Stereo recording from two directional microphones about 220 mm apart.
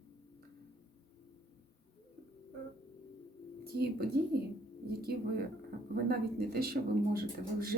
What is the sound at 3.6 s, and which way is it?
A woman's voice, 45° right (ahead or behind).